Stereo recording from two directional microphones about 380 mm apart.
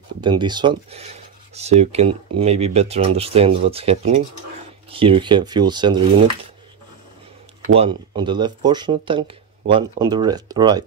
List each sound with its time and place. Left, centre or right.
0.2 s speech: centre
7.7 s speech: centre